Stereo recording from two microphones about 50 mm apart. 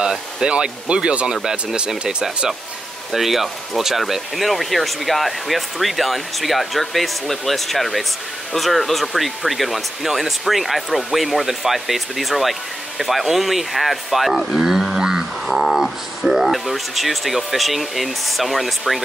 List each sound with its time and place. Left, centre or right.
0.0 s speech: centre